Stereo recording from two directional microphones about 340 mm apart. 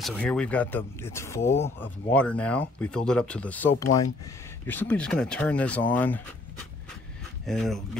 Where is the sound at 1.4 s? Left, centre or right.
Centre.